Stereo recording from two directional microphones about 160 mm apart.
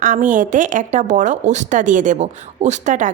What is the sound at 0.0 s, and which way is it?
A woman's voice, 50° right (ahead or behind).